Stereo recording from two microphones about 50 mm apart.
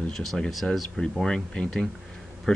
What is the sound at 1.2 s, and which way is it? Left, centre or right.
Speech, centre.